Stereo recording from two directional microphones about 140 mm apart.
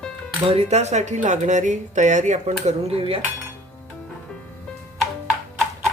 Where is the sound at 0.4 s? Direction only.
45° right (ahead or behind).